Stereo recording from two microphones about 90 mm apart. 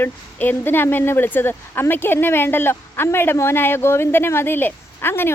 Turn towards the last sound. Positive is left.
turn(degrees=25)  # may be behind; listen again after turning